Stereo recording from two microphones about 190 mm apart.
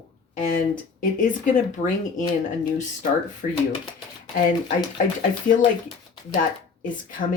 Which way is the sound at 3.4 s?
45° left (ahead or behind).